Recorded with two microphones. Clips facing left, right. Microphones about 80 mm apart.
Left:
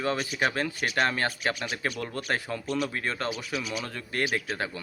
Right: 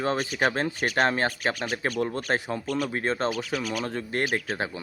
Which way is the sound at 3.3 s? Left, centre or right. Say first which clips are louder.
Right 4 dB; right.